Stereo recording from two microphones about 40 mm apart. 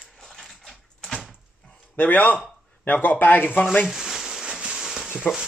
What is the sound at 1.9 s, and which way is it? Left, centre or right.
Speech, left.